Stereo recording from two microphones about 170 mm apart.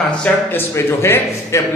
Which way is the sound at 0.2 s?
10° left (ahead or behind).